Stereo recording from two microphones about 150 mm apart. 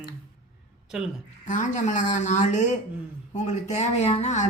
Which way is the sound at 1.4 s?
55° left (ahead or behind).